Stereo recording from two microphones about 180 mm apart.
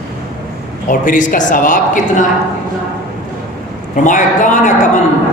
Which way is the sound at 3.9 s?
45° left (ahead or behind).